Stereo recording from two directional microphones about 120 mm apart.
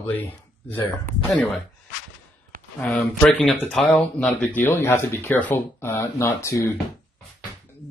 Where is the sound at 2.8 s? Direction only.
5° left (ahead or behind); by 6.8 s 25° left (ahead or behind).